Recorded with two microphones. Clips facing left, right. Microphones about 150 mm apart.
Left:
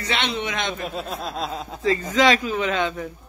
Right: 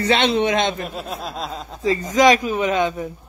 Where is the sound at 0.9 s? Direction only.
Centre (ahead or behind).